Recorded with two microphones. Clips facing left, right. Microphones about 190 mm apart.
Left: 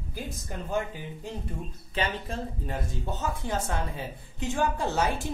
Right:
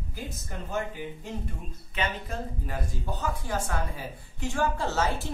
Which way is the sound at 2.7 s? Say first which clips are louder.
Left 1 dB; 25° left (ahead or behind).